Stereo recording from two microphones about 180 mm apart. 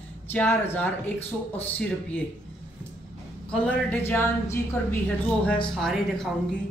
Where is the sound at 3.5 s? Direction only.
10° left (ahead or behind).